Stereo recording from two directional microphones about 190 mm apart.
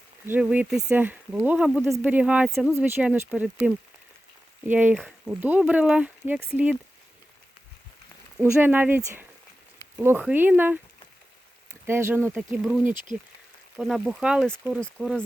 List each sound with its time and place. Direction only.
0.3 s speech: 10° right (ahead or behind)
8.4 s speech: 10° right (ahead or behind)
15.0 s speech: 15° right (ahead or behind)